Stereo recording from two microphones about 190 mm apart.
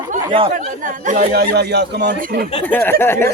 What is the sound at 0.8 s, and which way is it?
Speech, 45° right (ahead or behind).